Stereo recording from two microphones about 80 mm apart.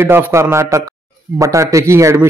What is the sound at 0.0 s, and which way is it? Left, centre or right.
A man's voice, right.